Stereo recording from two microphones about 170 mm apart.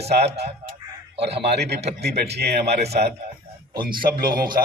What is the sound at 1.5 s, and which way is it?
A man's voice, 75° right (ahead or behind).